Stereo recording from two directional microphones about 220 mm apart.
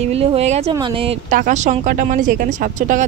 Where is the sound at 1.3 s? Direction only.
35° right (ahead or behind).